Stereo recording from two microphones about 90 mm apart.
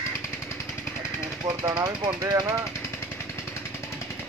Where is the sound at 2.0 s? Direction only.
50° right (ahead or behind).